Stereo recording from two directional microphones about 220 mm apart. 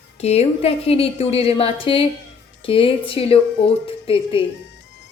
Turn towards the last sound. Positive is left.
turn(degrees=25)  # may be behind; listen again after turning